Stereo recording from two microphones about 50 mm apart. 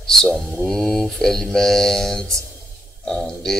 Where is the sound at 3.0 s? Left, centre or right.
Centre.